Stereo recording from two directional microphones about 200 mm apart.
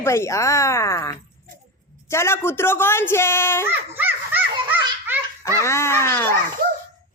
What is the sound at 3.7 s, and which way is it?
Children playing, 10° right (ahead or behind).